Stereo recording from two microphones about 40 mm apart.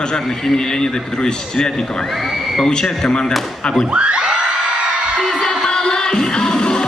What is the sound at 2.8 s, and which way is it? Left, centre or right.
A man's voice, centre.